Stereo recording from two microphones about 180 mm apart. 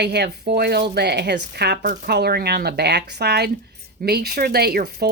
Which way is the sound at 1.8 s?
45° right (ahead or behind).